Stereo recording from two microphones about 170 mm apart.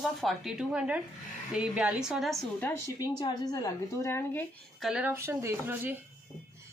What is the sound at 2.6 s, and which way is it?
A woman's voice, 20° left (ahead or behind).